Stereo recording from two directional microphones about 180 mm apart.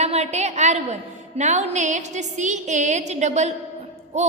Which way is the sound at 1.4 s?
40° right (ahead or behind).